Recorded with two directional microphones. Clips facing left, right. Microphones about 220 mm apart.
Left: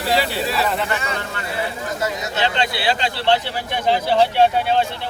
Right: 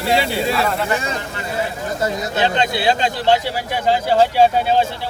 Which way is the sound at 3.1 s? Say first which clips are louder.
Right 2 dB; 10° right (ahead or behind).